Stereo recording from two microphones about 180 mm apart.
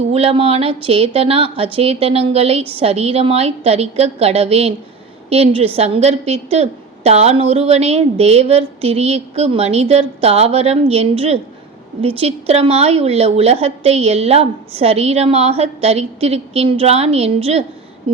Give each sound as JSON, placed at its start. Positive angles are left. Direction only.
{"t": 0.1, "sound": "a woman's voice", "side_deg": -30}